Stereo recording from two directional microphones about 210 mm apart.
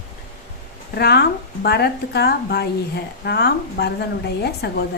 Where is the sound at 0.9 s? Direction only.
50° left (ahead or behind).